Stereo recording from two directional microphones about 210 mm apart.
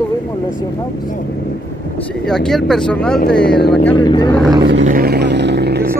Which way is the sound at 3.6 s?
50° left (ahead or behind).